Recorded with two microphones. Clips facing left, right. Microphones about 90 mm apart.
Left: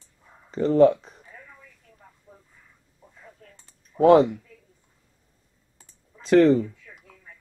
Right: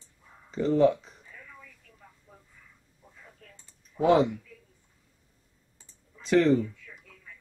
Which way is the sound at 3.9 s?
40° left (ahead or behind).